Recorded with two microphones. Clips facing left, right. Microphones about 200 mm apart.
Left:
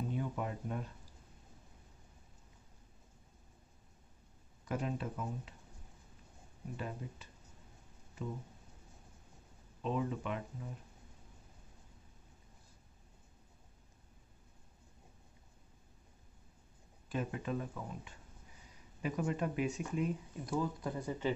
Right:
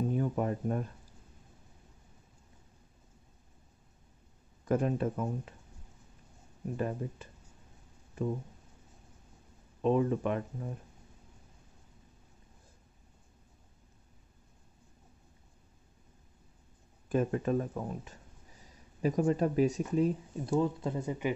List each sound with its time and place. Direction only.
0.1 s speech: 45° right (ahead or behind)
4.6 s speech: 50° right (ahead or behind)
6.8 s speech: 45° right (ahead or behind)
9.8 s speech: 50° right (ahead or behind)
17.1 s speech: 50° right (ahead or behind); by 21.3 s 20° right (ahead or behind)